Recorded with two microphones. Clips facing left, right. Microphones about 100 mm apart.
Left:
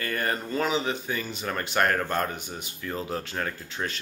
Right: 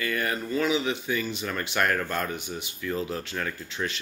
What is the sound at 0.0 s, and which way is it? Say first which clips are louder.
Speech: even; 40° left (ahead or behind).